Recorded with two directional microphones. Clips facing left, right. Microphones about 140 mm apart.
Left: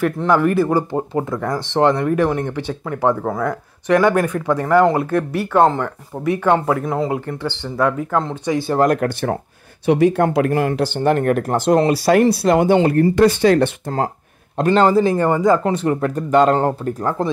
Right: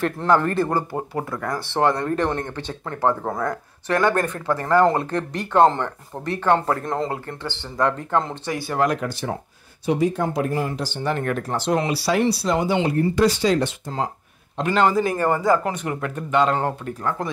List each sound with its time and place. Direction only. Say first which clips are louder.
0.0 s speech: left 3 dB; 5° left (ahead or behind)
3.3 s speech: left 4 dB; centre (ahead or behind)
3.8 s speech: left 5 dB; 15° left (ahead or behind)
6.3 s speech: left 3 dB; 15° left (ahead or behind)
7.1 s speech: left 6 dB; 15° left (ahead or behind)
8.5 s speech: left 8 dB; 25° left (ahead or behind)
8.7 s speech: left 5 dB; 50° left (ahead or behind)
9.8 s speech: left 7 dB; 70° left (ahead or behind)
14.7 s speech: left 5 dB; 30° left (ahead or behind)